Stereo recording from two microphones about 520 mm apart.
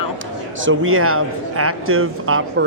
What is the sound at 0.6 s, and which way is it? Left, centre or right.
Speech, right.